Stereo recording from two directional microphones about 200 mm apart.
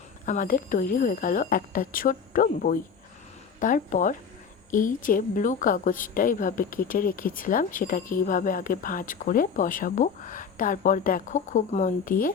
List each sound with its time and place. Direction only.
0.3 s a woman's voice: 40° left (ahead or behind)